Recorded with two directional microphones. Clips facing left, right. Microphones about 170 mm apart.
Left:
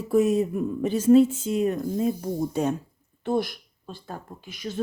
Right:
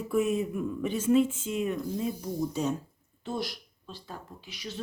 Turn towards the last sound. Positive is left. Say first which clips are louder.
# left 9 dB
turn(degrees=50)  # may be behind; listen again after turning